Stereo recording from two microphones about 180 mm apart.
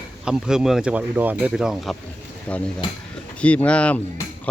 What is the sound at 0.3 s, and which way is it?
Speech, 5° right (ahead or behind).